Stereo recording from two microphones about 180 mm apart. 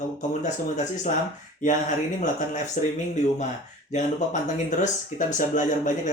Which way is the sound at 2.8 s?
45° left (ahead or behind).